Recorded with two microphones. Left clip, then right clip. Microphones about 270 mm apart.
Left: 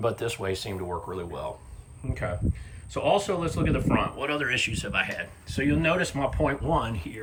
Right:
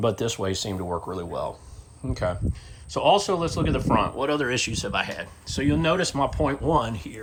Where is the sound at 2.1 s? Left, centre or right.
Centre.